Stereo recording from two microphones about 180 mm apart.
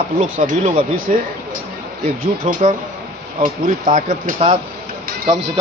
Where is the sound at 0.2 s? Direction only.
45° right (ahead or behind).